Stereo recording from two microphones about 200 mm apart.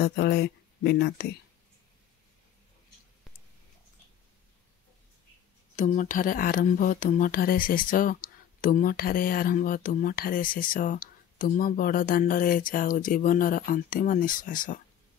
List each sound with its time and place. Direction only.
0.0 s speech: 50° left (ahead or behind)
5.8 s speech: 40° left (ahead or behind)